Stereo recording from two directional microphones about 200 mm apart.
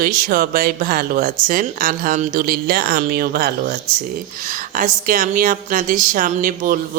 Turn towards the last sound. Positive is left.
turn(degrees=-45)  # may be behind; listen again after turning